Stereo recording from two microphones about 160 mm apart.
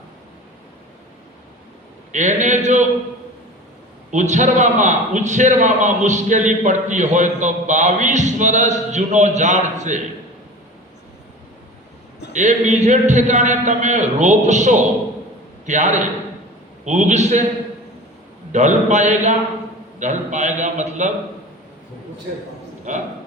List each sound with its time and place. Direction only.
2.1 s a man's voice: 50° right (ahead or behind)
4.1 s a man's voice: 50° right (ahead or behind)
12.3 s a man's voice: 50° right (ahead or behind)
18.5 s a man's voice: 50° right (ahead or behind)
22.9 s a man's voice: 50° right (ahead or behind)